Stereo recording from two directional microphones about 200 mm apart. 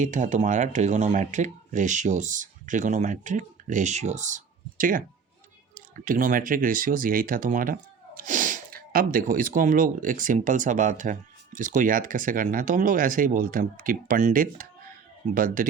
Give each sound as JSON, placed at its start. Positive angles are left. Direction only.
{"t": 0.0, "sound": "speech", "side_deg": -40}
{"t": 6.1, "sound": "speech", "side_deg": -45}